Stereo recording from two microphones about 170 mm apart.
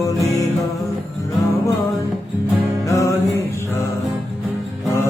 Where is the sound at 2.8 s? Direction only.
15° left (ahead or behind).